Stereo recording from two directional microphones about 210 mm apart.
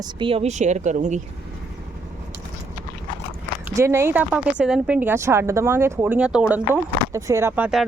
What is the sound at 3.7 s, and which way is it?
Speech, 15° right (ahead or behind).